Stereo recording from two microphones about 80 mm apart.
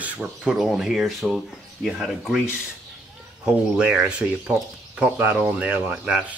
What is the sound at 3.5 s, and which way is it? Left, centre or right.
Speech, centre.